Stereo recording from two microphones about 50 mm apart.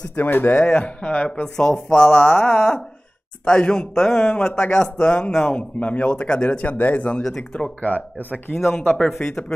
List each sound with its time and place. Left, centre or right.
0.1 s speech: left
0.7 s speech: left
1.4 s speech: centre; by 7.1 s left
7.2 s speech: centre